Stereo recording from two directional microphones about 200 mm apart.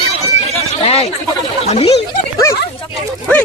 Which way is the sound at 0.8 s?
30° left (ahead or behind).